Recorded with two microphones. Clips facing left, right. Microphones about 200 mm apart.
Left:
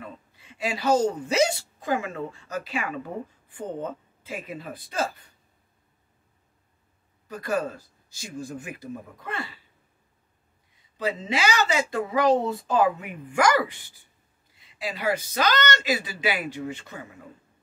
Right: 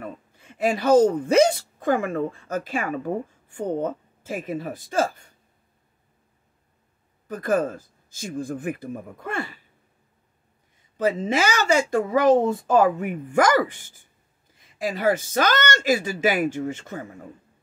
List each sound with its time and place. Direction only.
0.4 s speech: 50° right (ahead or behind)
7.2 s speech: 50° right (ahead or behind)
11.0 s speech: 50° right (ahead or behind)